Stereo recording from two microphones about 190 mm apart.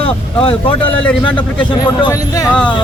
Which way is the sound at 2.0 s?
15° left (ahead or behind).